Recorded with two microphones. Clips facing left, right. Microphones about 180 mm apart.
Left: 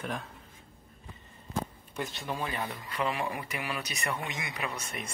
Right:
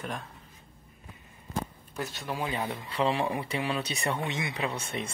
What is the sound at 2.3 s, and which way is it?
Speech, 20° right (ahead or behind).